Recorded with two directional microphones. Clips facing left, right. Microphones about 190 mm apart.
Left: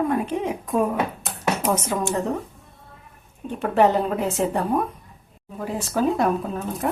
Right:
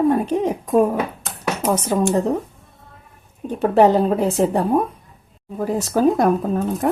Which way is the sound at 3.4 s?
40° right (ahead or behind).